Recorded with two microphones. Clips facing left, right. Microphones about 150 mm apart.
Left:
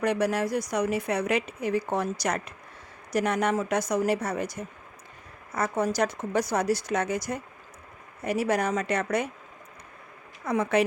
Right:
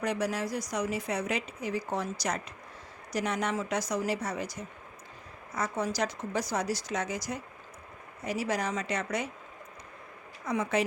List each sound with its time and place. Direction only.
0.0 s a woman's voice: 60° left (ahead or behind)
10.4 s a woman's voice: 60° left (ahead or behind)